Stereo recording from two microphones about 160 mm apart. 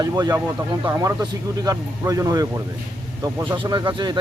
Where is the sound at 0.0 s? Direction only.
20° right (ahead or behind).